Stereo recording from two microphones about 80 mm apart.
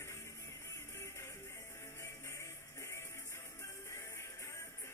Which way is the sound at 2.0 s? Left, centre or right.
Left.